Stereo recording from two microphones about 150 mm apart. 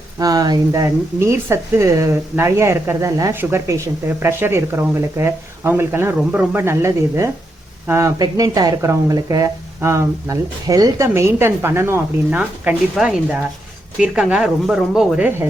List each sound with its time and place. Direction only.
0.2 s speech: 25° right (ahead or behind); by 15.4 s 5° right (ahead or behind)